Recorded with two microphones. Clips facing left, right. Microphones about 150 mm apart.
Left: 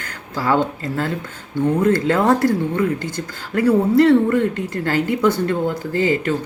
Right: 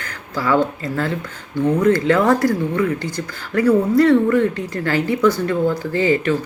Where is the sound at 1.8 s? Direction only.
25° left (ahead or behind).